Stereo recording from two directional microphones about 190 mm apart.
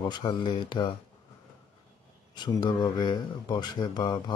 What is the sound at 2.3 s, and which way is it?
Speech, 20° left (ahead or behind).